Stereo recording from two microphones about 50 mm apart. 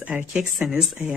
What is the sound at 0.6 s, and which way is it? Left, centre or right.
Speech, centre.